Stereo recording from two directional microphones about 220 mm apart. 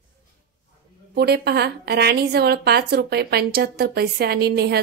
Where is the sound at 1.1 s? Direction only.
45° right (ahead or behind).